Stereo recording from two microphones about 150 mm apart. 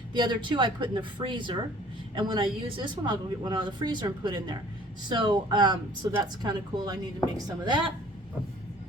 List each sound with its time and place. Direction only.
0.1 s a woman's voice: 30° right (ahead or behind)